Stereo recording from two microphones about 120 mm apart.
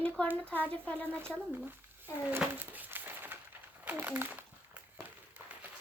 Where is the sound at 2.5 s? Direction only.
15° right (ahead or behind).